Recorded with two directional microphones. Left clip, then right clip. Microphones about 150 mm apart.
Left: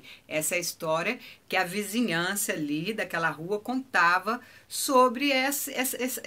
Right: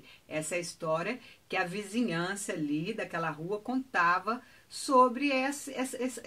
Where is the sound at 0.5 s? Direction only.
10° left (ahead or behind).